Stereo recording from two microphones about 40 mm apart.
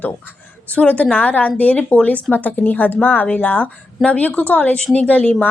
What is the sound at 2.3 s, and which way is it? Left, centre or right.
Speech, left.